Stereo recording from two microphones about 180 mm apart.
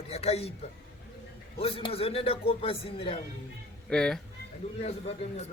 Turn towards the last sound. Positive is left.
turn(degrees=35)  # may be behind; listen again after turning